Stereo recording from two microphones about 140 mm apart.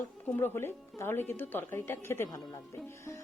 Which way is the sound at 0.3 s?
15° left (ahead or behind).